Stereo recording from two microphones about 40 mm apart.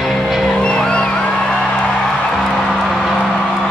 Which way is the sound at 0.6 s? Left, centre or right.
Left.